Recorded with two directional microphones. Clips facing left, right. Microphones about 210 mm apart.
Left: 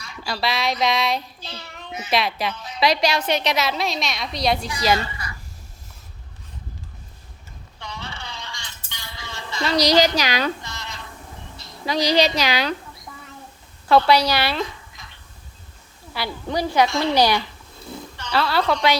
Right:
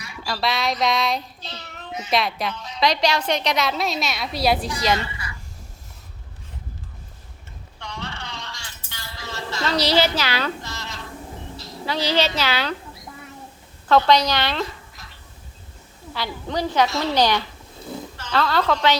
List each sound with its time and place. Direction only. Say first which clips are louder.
0.3 s a child's voice: even; centre (ahead or behind)
4.9 s a sound: left 1 dB; 40° left (ahead or behind)
7.8 s music: right 1 dB; 5° left (ahead or behind)
9.6 s a woman's voice: left 3 dB; 15° left (ahead or behind)
10.6 s a sound: right 2 dB; centre (ahead or behind)
11.9 s a woman's voice: left 3 dB; 15° left (ahead or behind)
14.1 s a woman's voice: even; 10° left (ahead or behind)
14.6 s a sound: even; 5° right (ahead or behind)
16.1 s a woman's voice: left 1 dB; 10° left (ahead or behind)
16.9 s a child's voice: left 2 dB; 5° right (ahead or behind)
17.2 s a woman's voice: even; 10° left (ahead or behind)